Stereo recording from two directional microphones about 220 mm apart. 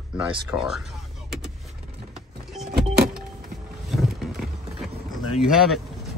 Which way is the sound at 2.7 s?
45° right (ahead or behind).